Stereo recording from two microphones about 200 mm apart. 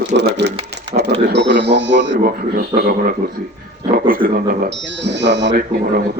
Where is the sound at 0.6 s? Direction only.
60° right (ahead or behind).